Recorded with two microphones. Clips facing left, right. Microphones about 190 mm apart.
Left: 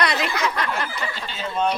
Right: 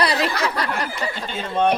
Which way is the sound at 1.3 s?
60° right (ahead or behind).